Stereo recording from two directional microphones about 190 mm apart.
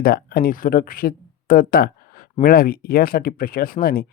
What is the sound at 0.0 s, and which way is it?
Speech, 55° left (ahead or behind).